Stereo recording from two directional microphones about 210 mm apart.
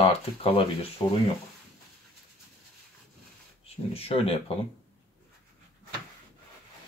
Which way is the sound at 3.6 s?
30° left (ahead or behind).